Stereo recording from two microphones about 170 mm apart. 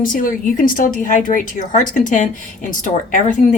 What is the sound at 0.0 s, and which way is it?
A woman's voice, 55° left (ahead or behind).